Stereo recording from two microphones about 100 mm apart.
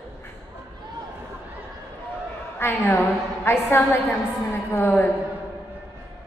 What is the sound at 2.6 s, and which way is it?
A woman's voice, 20° left (ahead or behind).